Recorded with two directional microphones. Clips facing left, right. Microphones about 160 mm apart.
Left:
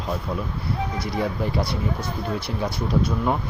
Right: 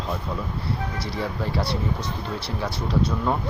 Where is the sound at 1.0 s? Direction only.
15° left (ahead or behind).